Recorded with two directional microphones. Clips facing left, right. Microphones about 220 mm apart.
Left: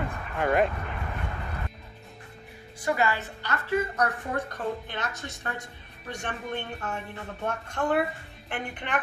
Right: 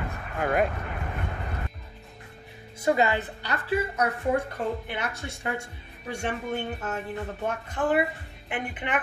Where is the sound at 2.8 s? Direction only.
20° right (ahead or behind).